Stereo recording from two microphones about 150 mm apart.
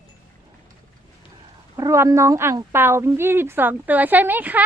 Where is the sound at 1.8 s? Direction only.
20° right (ahead or behind).